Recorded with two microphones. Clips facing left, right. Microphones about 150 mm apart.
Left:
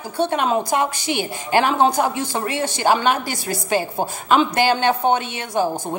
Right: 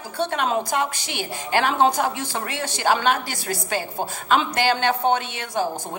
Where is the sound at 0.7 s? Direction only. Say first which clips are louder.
Left 5 dB; 50° left (ahead or behind).